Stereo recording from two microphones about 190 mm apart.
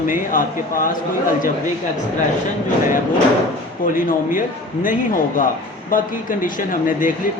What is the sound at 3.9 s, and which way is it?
Speech, 45° left (ahead or behind).